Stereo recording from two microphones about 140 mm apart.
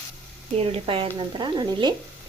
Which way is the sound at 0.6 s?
40° right (ahead or behind).